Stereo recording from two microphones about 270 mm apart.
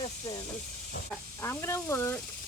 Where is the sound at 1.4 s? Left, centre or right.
Centre.